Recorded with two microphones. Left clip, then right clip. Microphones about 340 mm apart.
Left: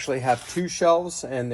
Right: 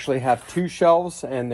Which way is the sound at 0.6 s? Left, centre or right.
Right.